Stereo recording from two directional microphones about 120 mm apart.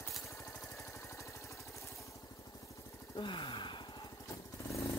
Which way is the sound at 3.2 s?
40° left (ahead or behind).